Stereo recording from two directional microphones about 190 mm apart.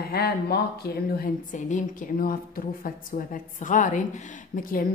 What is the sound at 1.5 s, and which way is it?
Speech, 40° left (ahead or behind).